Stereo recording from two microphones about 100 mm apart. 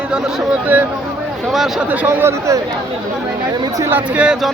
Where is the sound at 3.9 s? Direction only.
10° right (ahead or behind).